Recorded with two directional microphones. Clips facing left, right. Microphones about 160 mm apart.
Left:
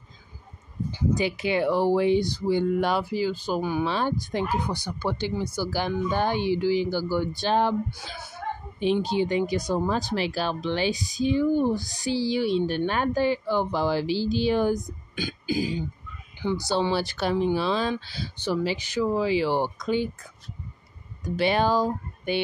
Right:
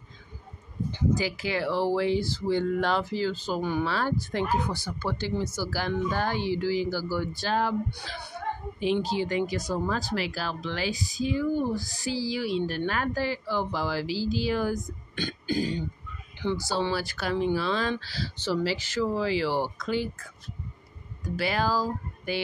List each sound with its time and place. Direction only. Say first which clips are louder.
1.1 s speech: left 4 dB; 20° left (ahead or behind)
9.1 s speech: left 3 dB; 20° left (ahead or behind)
15.1 s throat clearing: left 1 dB; 10° left (ahead or behind)
16.6 s speech: left 3 dB; 20° left (ahead or behind)